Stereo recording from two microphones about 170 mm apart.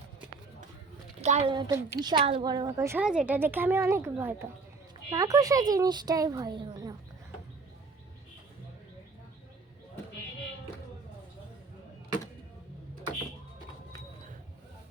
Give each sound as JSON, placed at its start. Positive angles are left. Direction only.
{"t": 1.2, "sound": "a woman's voice", "side_deg": -40}
{"t": 1.5, "sound": "speech", "side_deg": -25}
{"t": 3.0, "sound": "a woman's voice", "side_deg": -5}